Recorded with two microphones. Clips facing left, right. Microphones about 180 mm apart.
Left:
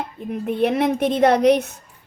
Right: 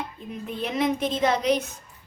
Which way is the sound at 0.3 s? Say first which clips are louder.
Left 12 dB; 60° left (ahead or behind).